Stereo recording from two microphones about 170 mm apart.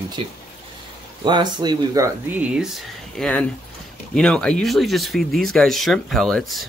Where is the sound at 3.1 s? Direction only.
5° left (ahead or behind).